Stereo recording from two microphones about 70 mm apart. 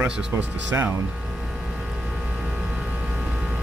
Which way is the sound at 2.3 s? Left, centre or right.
Centre.